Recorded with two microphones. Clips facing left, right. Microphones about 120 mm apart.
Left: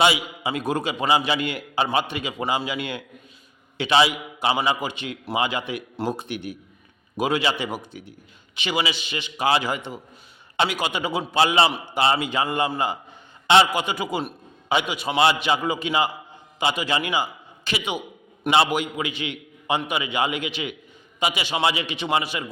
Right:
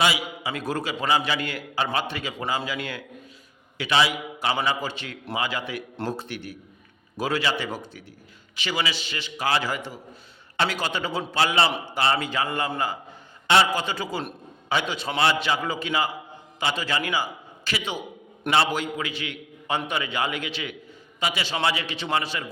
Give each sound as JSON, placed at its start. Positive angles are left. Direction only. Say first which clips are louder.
{"t": 0.0, "sound": "a man's voice", "louder": "left 3 dB", "side_deg": 25}